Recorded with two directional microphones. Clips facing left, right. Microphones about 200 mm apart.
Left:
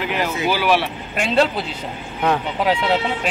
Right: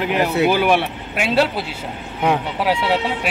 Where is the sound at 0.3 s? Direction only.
60° right (ahead or behind).